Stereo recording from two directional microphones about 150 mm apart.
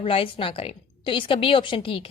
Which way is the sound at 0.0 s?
35° left (ahead or behind).